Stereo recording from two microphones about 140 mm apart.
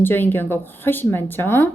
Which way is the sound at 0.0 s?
15° left (ahead or behind).